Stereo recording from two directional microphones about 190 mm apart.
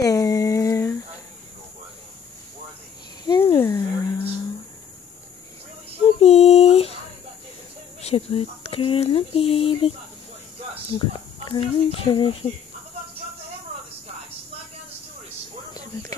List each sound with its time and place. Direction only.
0.0 s a sound: 20° left (ahead or behind)
3.3 s a sound: 20° left (ahead or behind)
6.0 s female singing: 35° left (ahead or behind)
8.0 s speech: 30° left (ahead or behind)
11.4 s speech: 25° left (ahead or behind)
15.7 s whispering: 20° left (ahead or behind)